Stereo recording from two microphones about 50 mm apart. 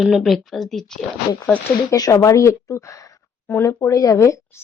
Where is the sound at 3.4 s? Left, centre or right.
Left.